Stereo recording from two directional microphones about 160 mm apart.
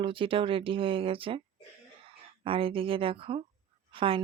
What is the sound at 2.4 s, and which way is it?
Speech, 35° right (ahead or behind).